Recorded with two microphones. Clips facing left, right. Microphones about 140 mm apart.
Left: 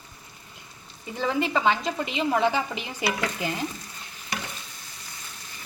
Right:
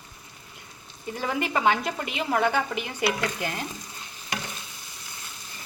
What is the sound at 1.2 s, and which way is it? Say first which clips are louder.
Speech: left 1 dB; 10° right (ahead or behind).